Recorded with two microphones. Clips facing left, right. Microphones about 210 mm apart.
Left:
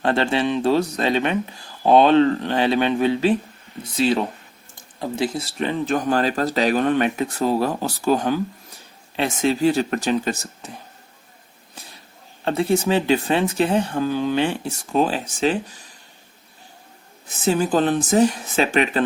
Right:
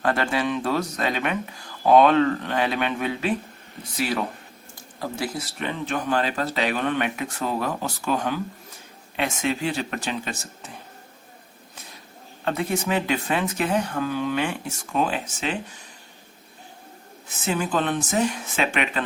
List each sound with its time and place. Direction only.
0.0 s speech: 25° left (ahead or behind)
12.5 s speech: 30° left (ahead or behind)
17.4 s speech: 35° left (ahead or behind)